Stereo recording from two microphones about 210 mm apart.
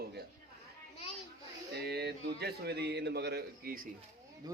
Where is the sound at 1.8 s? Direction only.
50° right (ahead or behind).